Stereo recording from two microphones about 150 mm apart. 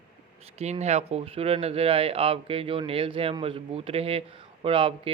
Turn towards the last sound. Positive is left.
turn(degrees=-35)  # may be behind; listen again after turning